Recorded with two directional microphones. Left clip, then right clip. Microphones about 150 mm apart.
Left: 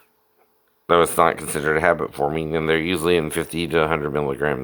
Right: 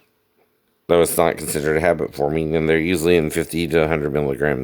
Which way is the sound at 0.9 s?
40° right (ahead or behind).